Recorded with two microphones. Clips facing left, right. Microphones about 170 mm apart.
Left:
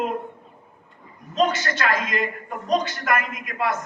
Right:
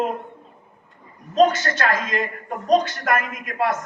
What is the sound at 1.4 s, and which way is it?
A man's voice, 50° right (ahead or behind).